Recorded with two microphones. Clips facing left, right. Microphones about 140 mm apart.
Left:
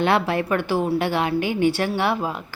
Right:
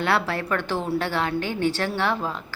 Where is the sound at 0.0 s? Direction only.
15° left (ahead or behind).